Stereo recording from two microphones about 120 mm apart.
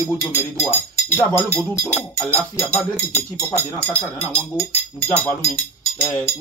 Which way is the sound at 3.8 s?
10° left (ahead or behind).